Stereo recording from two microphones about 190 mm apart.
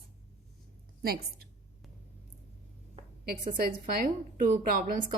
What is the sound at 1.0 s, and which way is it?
Speech, 55° right (ahead or behind).